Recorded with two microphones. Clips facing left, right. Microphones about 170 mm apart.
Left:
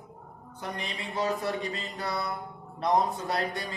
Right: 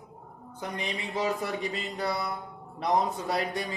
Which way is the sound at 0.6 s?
20° right (ahead or behind).